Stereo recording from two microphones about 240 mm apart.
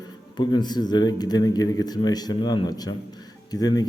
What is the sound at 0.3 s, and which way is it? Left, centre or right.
A man's voice, centre.